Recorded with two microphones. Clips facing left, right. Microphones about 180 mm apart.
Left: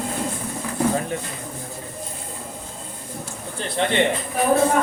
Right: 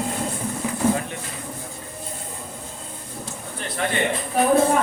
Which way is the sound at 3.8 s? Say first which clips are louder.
Left 3 dB; 30° left (ahead or behind).